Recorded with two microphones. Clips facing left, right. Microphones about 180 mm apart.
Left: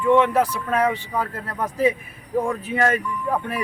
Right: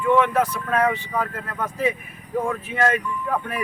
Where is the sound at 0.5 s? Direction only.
10° left (ahead or behind).